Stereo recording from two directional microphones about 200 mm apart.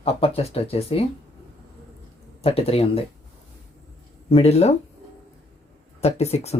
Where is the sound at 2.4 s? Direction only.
30° left (ahead or behind).